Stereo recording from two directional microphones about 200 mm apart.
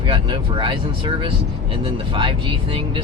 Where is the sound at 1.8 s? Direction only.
25° right (ahead or behind).